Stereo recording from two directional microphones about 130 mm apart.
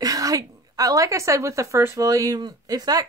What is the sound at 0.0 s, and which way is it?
A woman's voice, 30° right (ahead or behind).